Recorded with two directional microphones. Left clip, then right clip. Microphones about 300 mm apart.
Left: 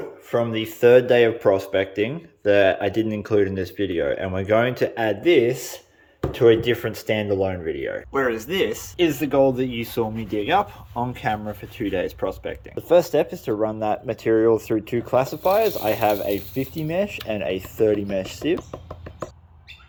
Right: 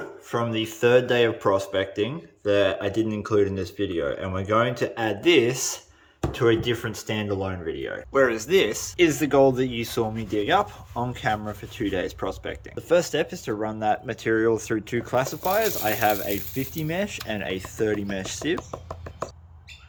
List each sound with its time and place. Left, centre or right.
0.3 s speech: centre
18.5 s knock: right